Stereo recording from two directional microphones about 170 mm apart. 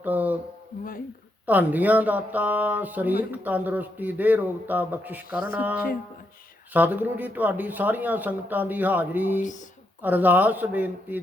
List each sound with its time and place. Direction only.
0.0 s a sound: 10° right (ahead or behind)
1.5 s speech: 10° right (ahead or behind)
9.4 s speech: 45° left (ahead or behind)
10.0 s speech: 10° right (ahead or behind)